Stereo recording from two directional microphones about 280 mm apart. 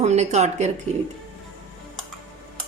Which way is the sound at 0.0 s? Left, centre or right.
Right.